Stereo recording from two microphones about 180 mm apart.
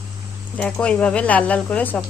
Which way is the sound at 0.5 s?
5° left (ahead or behind).